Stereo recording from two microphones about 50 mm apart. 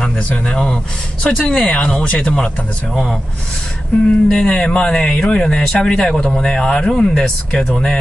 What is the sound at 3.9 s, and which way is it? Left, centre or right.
Speech, left.